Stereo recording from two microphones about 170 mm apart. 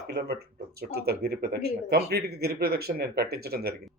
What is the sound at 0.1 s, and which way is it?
Speech, 70° right (ahead or behind).